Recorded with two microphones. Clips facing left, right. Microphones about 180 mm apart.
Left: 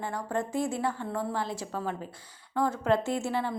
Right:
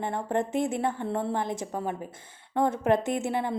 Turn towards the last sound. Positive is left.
turn(degrees=-20)  # may be behind; listen again after turning